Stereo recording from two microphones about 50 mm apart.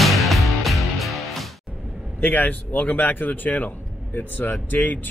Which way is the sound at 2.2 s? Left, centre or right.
Left.